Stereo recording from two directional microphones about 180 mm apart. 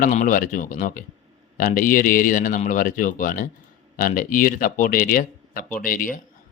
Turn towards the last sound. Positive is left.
turn(degrees=50)  # may be behind; listen again after turning